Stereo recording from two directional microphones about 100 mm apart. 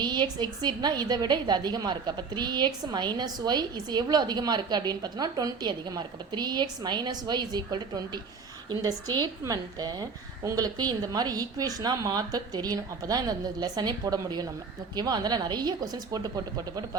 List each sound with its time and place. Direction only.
0.0 s a woman's voice: 45° right (ahead or behind)